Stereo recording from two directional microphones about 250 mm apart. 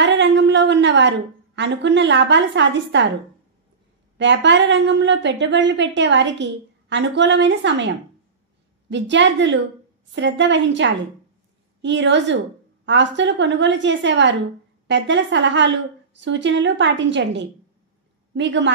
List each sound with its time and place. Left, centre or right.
0.0 s a woman's voice: right
4.2 s a woman's voice: right